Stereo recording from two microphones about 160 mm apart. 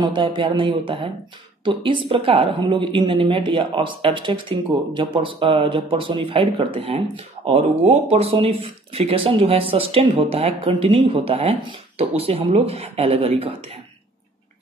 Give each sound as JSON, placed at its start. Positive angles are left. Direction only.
{"t": 0.0, "sound": "a woman's voice", "side_deg": -30}